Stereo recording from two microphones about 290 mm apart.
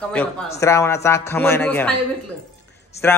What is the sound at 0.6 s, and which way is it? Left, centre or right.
A man's voice, centre.